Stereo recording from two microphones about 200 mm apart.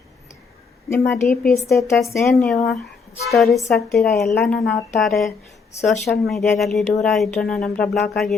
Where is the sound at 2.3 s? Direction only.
Centre (ahead or behind).